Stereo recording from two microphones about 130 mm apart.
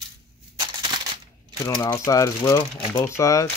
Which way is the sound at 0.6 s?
35° right (ahead or behind).